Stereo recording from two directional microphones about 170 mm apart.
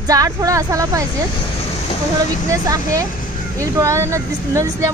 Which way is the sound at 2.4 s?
20° right (ahead or behind).